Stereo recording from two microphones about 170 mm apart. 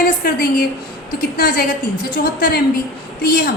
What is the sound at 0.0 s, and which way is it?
A woman's voice, 60° left (ahead or behind).